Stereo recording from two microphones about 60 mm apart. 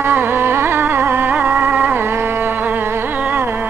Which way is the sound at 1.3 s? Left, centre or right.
Right.